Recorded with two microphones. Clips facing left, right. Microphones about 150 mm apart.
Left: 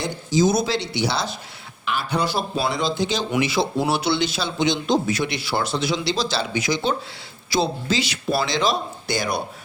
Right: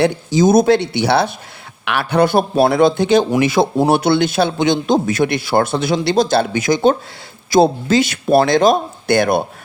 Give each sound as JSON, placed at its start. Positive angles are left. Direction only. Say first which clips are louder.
{"t": 0.0, "sound": "a man's voice", "louder": "right 6 dB", "side_deg": -60}